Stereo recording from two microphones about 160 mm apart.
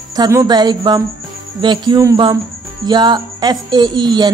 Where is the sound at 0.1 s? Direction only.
20° right (ahead or behind).